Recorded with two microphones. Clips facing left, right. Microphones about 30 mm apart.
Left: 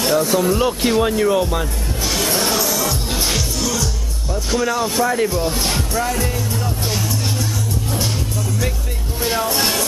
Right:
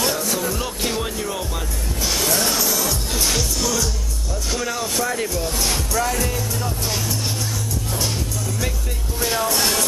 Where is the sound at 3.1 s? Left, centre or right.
Left.